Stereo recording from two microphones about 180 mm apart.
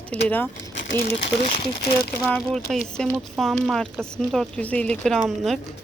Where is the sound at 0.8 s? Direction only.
85° left.